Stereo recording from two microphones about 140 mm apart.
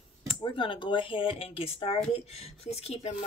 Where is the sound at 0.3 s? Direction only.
35° left (ahead or behind).